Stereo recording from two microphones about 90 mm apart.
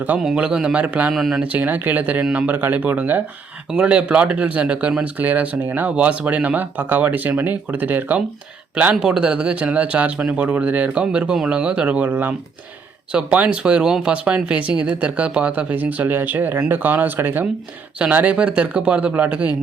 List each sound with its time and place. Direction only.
0.2 s a man's voice: 5° right (ahead or behind)
1.1 s a man's voice: centre (ahead or behind)
1.4 s speech: 15° right (ahead or behind)